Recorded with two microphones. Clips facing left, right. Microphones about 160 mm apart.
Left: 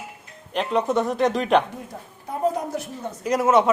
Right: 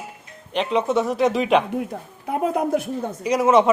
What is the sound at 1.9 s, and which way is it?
Speech, 75° right (ahead or behind).